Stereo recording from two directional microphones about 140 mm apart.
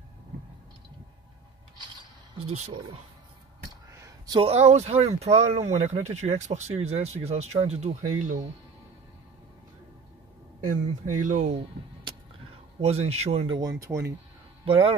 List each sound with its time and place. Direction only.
2.3 s speech: 50° right (ahead or behind)
3.9 s a sound: 20° right (ahead or behind)
4.4 s speech: 50° right (ahead or behind)
11.1 s speech: 65° right (ahead or behind)
12.8 s speech: 50° right (ahead or behind)
13.6 s speech: 25° right (ahead or behind)
14.6 s speech: 40° right (ahead or behind)